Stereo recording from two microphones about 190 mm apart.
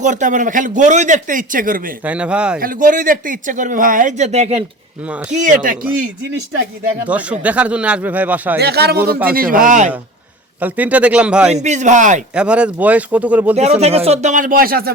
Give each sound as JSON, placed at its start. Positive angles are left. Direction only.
{"t": 0.0, "sound": "speech", "side_deg": -40}
{"t": 2.0, "sound": "speech", "side_deg": -5}
{"t": 2.6, "sound": "speech", "side_deg": -45}
{"t": 7.1, "sound": "speech", "side_deg": -5}
{"t": 8.5, "sound": "speech", "side_deg": -55}
{"t": 10.6, "sound": "speech", "side_deg": -10}
{"t": 11.5, "sound": "speech", "side_deg": -40}
{"t": 12.3, "sound": "speech", "side_deg": -5}
{"t": 13.6, "sound": "speech", "side_deg": -35}